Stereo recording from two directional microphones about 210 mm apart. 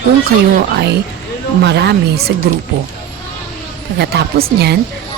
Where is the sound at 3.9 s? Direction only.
50° right (ahead or behind).